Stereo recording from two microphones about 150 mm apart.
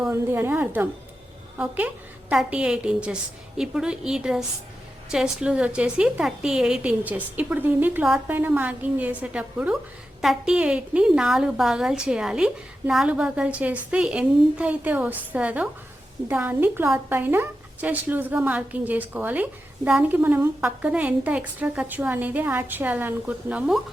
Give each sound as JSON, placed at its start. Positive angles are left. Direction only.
{"t": 0.1, "sound": "a woman's voice", "side_deg": -15}